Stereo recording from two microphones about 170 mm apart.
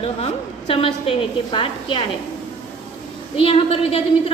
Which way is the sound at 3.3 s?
35° left (ahead or behind).